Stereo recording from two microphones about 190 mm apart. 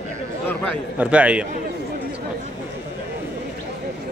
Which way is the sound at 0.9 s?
5° right (ahead or behind).